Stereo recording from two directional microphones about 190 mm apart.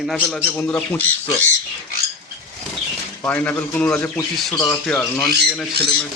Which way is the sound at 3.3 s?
10° left (ahead or behind).